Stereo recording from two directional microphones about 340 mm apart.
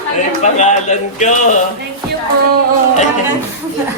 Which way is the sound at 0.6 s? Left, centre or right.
Left.